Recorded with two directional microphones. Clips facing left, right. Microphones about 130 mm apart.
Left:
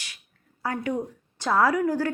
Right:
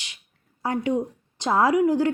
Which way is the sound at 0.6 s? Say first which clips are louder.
Right 4 dB; 20° right (ahead or behind).